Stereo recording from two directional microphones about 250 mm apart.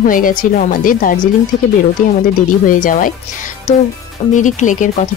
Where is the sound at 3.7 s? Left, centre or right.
Left.